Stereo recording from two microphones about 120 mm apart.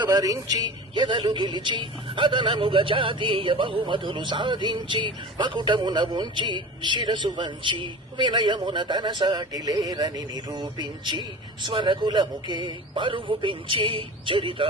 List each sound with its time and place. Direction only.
0.0 s a woman's voice: 35° right (ahead or behind)